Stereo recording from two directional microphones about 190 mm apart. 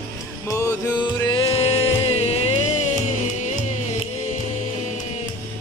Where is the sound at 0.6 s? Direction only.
15° left (ahead or behind).